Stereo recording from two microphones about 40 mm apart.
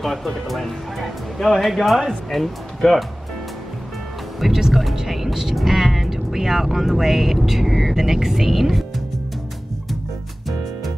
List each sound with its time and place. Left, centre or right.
0.0 s speech: centre
4.4 s speech: centre